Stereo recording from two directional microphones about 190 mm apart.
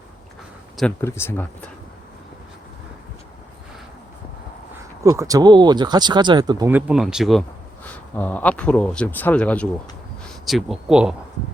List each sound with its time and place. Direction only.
0.8 s speech: 10° left (ahead or behind)
5.0 s speech: 20° right (ahead or behind)
6.7 s speech: 10° right (ahead or behind)
8.1 s speech: 10° left (ahead or behind)